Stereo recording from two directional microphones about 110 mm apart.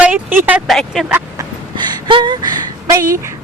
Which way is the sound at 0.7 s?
Centre (ahead or behind).